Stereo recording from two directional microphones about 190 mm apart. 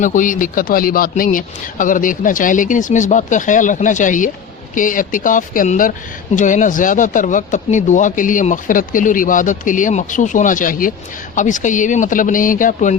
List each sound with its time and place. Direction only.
0.0 s speech: 45° left (ahead or behind)